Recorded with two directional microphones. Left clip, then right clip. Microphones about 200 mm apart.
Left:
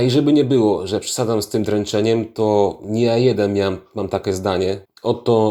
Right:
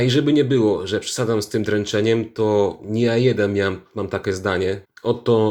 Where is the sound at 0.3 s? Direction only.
5° left (ahead or behind).